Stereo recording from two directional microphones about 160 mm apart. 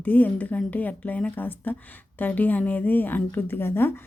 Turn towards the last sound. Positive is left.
turn(degrees=15)  # may be behind; listen again after turning